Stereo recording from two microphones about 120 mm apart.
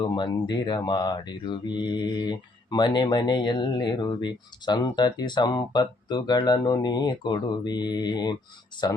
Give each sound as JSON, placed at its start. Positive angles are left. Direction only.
{"t": 0.0, "sound": "speech", "side_deg": 35}